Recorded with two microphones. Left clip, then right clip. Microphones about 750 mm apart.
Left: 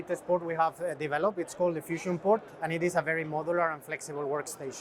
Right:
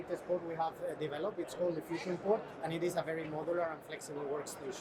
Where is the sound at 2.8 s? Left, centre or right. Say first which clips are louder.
Left 8 dB; left.